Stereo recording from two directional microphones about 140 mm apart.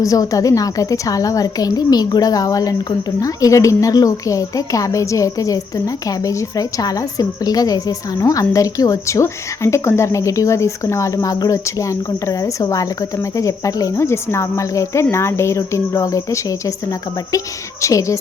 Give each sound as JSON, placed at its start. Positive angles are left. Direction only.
{"t": 0.0, "sound": "a woman's voice", "side_deg": 25}